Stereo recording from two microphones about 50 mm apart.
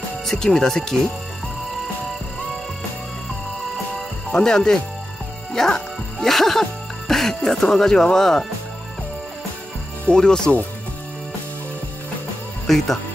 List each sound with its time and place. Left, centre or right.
0.3 s speech: centre
4.3 s speech: centre
10.0 s speech: centre
12.6 s speech: centre